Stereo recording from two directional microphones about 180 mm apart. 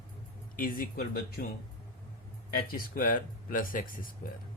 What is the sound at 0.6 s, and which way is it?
Speech, 50° left (ahead or behind).